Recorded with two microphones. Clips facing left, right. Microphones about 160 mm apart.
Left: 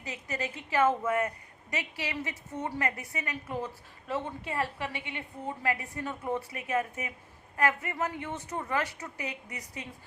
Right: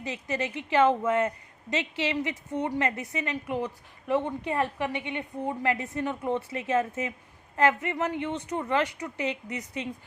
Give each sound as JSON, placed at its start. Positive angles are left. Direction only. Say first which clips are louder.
{"t": 0.0, "sound": "a woman's voice", "louder": "right 5 dB", "side_deg": -20}